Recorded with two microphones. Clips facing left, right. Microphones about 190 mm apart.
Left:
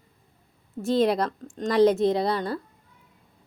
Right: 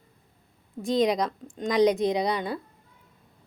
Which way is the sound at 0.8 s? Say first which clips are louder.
Left 1 dB; 5° left (ahead or behind).